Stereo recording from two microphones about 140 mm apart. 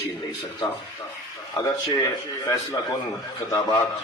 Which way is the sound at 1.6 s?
25° left (ahead or behind).